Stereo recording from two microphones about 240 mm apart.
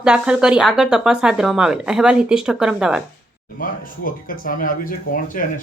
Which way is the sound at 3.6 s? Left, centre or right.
Left.